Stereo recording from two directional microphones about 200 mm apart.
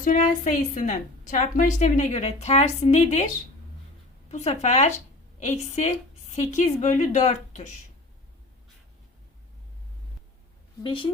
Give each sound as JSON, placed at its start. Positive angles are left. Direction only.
{"t": 0.0, "sound": "a woman's voice", "side_deg": 40}
{"t": 4.3, "sound": "a woman's voice", "side_deg": 35}
{"t": 10.8, "sound": "a woman's voice", "side_deg": 25}